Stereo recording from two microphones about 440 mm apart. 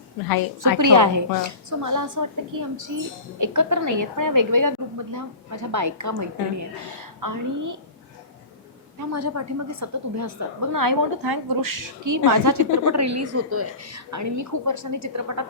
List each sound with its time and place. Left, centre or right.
0.3 s a woman's voice: left
0.8 s a woman's voice: right
9.0 s a woman's voice: right